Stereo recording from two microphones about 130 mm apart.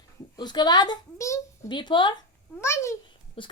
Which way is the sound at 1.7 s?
35° left (ahead or behind).